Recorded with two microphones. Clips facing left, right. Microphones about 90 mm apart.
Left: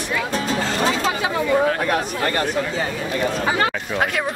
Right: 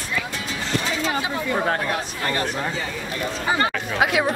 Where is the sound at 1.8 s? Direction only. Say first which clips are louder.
Left 5 dB; 55° left (ahead or behind).